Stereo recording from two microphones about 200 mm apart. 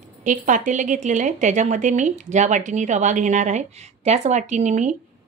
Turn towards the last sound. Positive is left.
turn(degrees=-35)  # may be behind; listen again after turning